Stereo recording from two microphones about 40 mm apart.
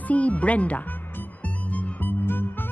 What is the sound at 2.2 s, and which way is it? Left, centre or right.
Music, left.